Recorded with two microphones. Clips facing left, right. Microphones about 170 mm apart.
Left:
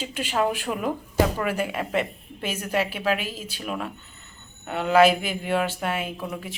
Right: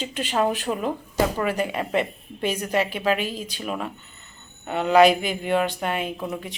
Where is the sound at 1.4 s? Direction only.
5° left (ahead or behind).